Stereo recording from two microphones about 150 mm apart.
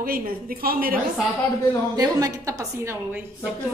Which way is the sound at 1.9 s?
25° right (ahead or behind).